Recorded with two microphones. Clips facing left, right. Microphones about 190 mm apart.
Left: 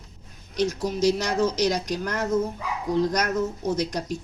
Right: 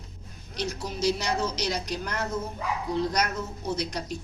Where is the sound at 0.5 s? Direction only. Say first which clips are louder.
Left 7 dB; 45° left (ahead or behind).